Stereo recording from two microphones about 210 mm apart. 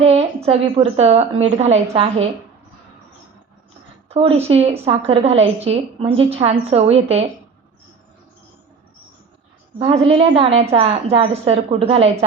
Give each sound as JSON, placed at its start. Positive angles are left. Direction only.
{"t": 0.0, "sound": "a woman's voice", "side_deg": -30}
{"t": 4.1, "sound": "a woman's voice", "side_deg": -30}
{"t": 9.7, "sound": "a woman's voice", "side_deg": -25}